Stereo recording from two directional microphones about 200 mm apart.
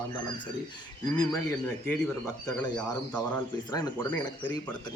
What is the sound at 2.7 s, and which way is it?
A man's voice, 20° left (ahead or behind).